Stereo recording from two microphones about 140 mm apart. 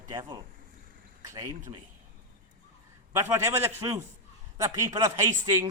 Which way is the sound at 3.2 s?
20° right (ahead or behind).